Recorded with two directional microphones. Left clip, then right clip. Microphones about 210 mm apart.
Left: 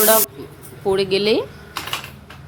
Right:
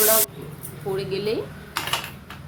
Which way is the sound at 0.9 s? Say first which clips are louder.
Left 8 dB; 45° left (ahead or behind).